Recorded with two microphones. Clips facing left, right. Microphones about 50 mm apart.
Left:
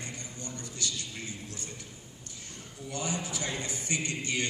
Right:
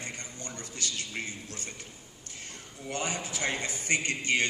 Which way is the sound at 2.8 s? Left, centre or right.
Right.